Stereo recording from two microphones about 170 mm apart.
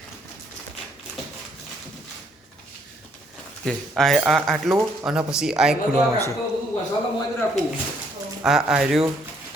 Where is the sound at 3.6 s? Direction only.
Centre (ahead or behind).